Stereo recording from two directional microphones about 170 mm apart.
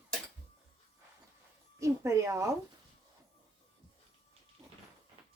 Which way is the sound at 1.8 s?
15° right (ahead or behind).